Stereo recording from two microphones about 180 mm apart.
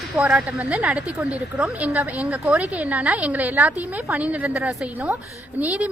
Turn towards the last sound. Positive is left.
turn(degrees=-5)  # may be behind; listen again after turning